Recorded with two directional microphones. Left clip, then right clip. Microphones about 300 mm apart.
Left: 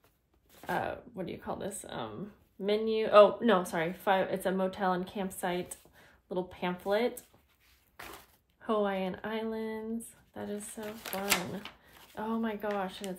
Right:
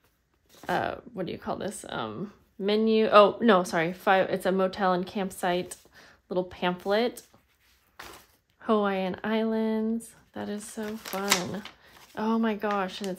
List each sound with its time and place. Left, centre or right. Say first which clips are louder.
0.7 s speech: right 5 dB; right
8.5 s speech: right 5 dB; right
12.2 s speech: right 7 dB; right